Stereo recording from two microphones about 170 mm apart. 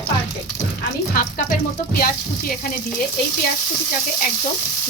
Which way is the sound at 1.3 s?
60° left (ahead or behind).